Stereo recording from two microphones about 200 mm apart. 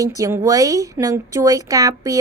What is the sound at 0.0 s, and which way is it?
A woman's voice, 15° right (ahead or behind).